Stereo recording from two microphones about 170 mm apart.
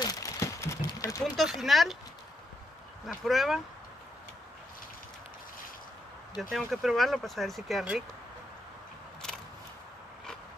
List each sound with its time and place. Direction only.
0.0 s a sound: 20° left (ahead or behind)
1.2 s speech: centre (ahead or behind)
3.1 s speech: centre (ahead or behind)
6.5 s speech: centre (ahead or behind)